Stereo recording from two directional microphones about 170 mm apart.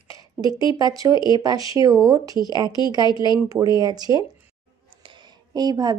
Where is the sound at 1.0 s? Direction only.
20° right (ahead or behind).